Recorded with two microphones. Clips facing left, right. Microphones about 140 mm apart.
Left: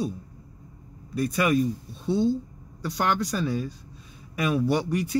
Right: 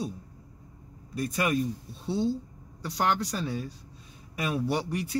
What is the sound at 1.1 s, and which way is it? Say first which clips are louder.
Speech: left 5 dB; 80° left.